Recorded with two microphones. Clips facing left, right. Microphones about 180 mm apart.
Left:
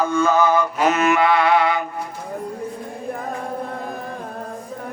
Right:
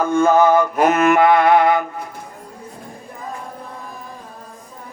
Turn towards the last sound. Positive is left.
turn(degrees=65)  # may be behind; listen again after turning